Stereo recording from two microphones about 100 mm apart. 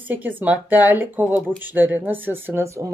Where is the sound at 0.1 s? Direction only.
20° right (ahead or behind).